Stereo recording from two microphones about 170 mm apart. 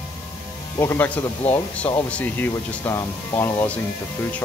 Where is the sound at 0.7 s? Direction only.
15° left (ahead or behind).